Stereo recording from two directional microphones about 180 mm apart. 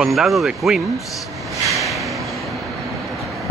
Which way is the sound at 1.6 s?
Centre (ahead or behind).